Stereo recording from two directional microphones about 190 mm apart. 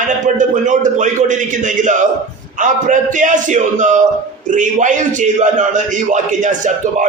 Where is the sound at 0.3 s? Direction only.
40° right (ahead or behind).